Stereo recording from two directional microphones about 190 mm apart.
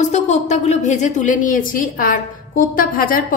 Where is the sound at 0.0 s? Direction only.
40° left (ahead or behind).